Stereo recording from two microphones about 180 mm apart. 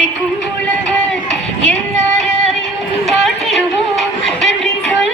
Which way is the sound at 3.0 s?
Centre (ahead or behind).